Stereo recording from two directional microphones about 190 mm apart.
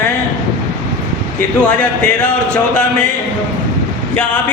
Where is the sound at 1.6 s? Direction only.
5° left (ahead or behind).